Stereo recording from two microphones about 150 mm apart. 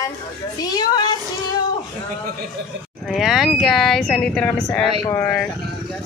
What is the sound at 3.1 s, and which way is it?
Speech, centre (ahead or behind).